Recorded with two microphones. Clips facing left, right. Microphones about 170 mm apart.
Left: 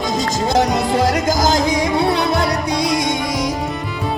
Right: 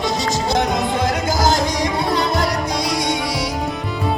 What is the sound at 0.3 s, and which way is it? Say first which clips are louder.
Music: left 4 dB; 50° left (ahead or behind).